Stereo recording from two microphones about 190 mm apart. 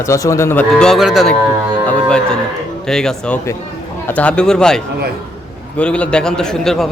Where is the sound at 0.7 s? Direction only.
Centre (ahead or behind).